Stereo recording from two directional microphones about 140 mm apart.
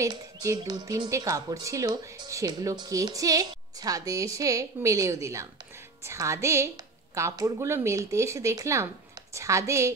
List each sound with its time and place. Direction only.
0.0 s speech: 25° right (ahead or behind)